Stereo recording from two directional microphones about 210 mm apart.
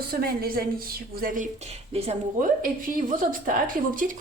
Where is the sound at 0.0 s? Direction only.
45° right (ahead or behind).